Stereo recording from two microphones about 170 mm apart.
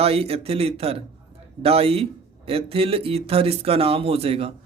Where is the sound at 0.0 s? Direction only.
35° right (ahead or behind).